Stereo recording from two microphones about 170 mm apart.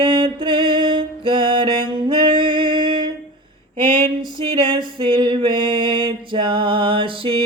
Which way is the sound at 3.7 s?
30° right (ahead or behind).